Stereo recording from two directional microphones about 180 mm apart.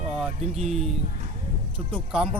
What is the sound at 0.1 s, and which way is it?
Music, centre (ahead or behind).